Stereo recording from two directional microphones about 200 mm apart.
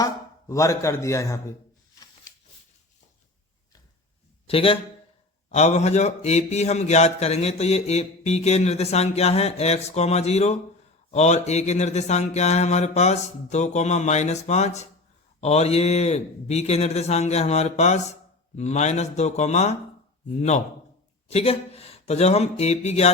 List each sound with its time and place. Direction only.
0.0 s speech: 15° left (ahead or behind)
4.4 s a man's voice: 30° left (ahead or behind)
21.2 s speech: 30° left (ahead or behind)